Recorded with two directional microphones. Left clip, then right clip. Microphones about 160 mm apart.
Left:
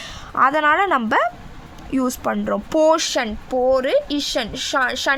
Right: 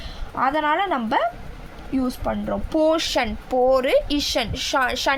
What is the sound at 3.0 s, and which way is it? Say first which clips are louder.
Speech: left 1 dB; 15° left (ahead or behind).